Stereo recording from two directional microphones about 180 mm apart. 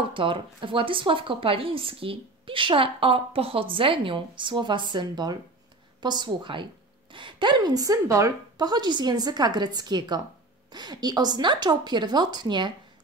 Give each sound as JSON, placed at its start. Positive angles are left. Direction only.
{"t": 0.1, "sound": "speech", "side_deg": -30}